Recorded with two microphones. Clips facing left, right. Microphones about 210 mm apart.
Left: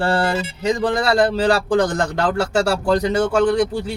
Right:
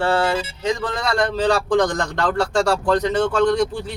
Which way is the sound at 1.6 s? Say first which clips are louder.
Left 1 dB; 5° left (ahead or behind).